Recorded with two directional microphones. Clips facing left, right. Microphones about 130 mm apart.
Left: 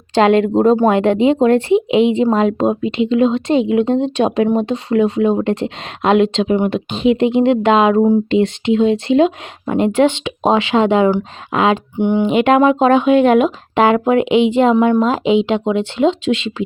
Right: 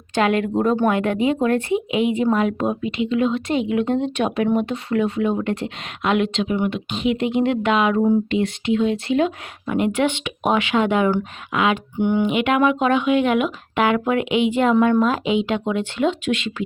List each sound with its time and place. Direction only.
0.1 s speech: 25° left (ahead or behind)